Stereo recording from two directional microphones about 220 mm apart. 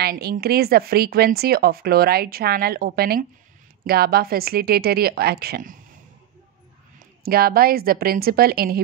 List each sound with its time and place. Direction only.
0.0 s speech: 45° right (ahead or behind)
7.2 s speech: 45° right (ahead or behind)